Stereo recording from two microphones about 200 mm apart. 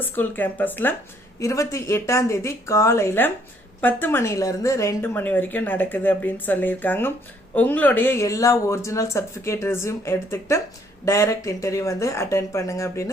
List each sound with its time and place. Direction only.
0.0 s a woman's voice: 10° left (ahead or behind)